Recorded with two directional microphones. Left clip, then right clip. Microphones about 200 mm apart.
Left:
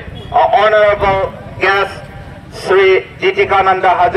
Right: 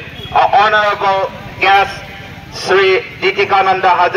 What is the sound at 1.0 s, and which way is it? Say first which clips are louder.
Speech: even; 40° right (ahead or behind).